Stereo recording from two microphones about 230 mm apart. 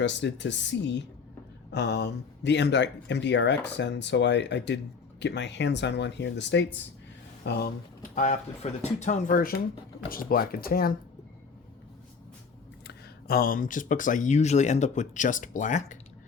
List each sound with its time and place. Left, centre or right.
0.0 s speech: left
8.1 s speech: left
12.9 s speech: left